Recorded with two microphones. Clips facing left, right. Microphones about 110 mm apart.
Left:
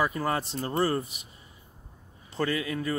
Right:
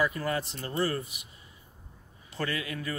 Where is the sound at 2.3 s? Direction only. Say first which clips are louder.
Left 5 dB; 30° left (ahead or behind).